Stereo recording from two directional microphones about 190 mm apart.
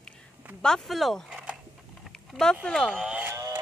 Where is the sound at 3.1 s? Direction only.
10° right (ahead or behind).